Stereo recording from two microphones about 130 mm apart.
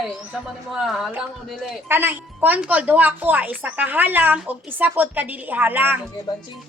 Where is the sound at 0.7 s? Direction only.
Centre (ahead or behind).